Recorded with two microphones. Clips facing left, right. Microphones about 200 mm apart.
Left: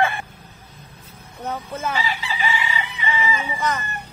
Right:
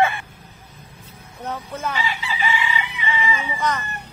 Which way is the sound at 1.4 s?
5° left (ahead or behind).